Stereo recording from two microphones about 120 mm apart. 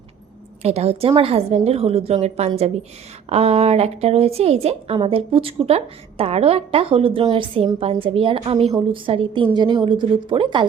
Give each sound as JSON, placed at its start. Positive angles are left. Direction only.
{"t": 0.6, "sound": "a woman's voice", "side_deg": -60}